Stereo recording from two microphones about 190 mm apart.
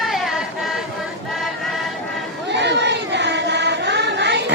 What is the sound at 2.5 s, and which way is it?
Child singing, 65° right (ahead or behind).